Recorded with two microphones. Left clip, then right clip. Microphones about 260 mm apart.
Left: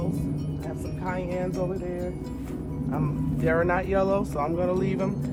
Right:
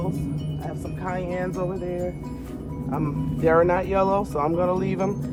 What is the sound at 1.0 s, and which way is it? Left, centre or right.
Speech, right.